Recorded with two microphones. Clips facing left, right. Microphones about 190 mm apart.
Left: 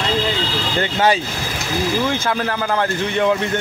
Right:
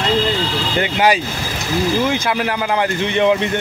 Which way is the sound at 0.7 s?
15° right (ahead or behind).